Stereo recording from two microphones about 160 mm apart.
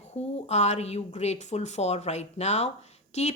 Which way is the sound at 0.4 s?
45° left (ahead or behind).